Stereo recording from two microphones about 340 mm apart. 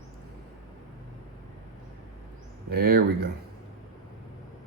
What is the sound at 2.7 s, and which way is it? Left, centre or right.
Speech, right.